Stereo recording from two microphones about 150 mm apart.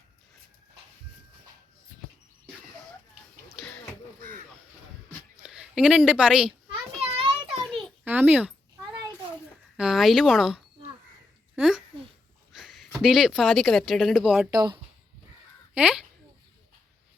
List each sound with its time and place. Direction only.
3.6 s a sound: 5° left (ahead or behind)
5.4 s speech: 5° right (ahead or behind)
7.3 s a sound: 5° right (ahead or behind)
9.7 s speech: 5° right (ahead or behind)
14.5 s speech: 25° right (ahead or behind)
15.7 s crow: 5° right (ahead or behind)